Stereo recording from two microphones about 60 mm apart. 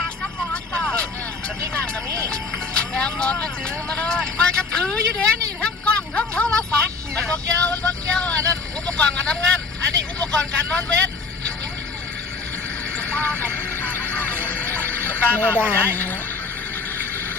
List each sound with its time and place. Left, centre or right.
0.5 s vehicle: centre
2.3 s speech: centre
5.6 s a sound: centre
7.2 s speech: centre
13.0 s vehicle: left
15.8 s a woman's voice: left